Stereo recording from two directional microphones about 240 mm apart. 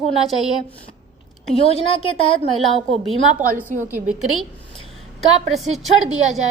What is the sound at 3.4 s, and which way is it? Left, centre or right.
Speech, right.